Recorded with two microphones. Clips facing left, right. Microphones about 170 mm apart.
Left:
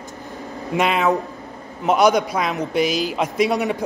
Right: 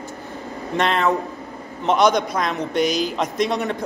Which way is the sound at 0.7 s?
5° left (ahead or behind).